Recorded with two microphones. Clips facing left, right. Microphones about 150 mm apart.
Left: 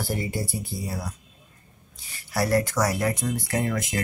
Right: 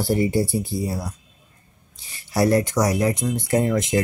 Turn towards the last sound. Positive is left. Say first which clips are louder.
# right 7 dB
turn(degrees=-25)  # may be behind; listen again after turning